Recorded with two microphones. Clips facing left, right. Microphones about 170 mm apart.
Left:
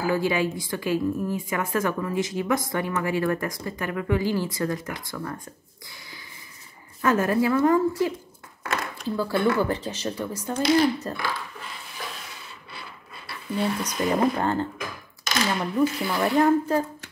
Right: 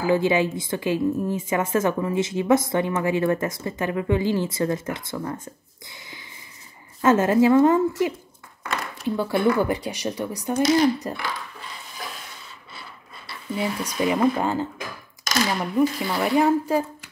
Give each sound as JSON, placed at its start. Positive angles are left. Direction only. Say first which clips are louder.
{"t": 0.0, "sound": "a woman's voice", "louder": "right 3 dB", "side_deg": -20}
{"t": 13.6, "sound": "speech", "louder": "right 1 dB", "side_deg": -10}